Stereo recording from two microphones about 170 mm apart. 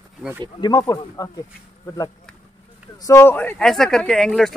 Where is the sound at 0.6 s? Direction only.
20° left (ahead or behind).